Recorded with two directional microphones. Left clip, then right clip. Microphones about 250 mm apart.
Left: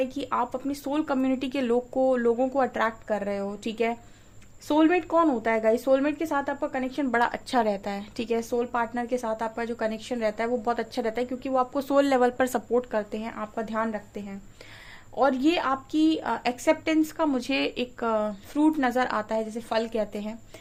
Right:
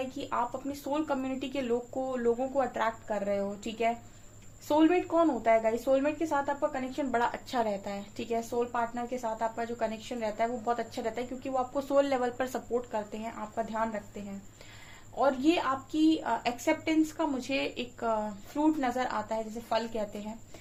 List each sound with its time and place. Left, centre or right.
0.1 s a woman's voice: left
15.1 s a woman's voice: left